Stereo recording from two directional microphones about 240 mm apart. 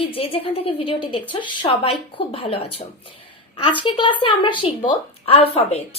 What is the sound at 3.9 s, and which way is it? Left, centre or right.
Speech, left.